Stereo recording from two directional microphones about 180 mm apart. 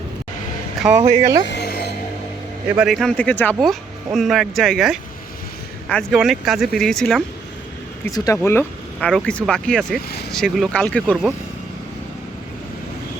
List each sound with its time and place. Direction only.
0.9 s speech: 40° right (ahead or behind)
1.5 s music: 65° left (ahead or behind)
2.7 s speech: centre (ahead or behind)
8.0 s speech: 20° left (ahead or behind)